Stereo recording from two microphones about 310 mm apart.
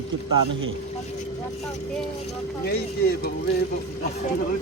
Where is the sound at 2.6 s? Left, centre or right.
Left.